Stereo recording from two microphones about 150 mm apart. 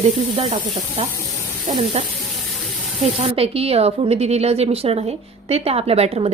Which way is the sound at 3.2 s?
40° right (ahead or behind).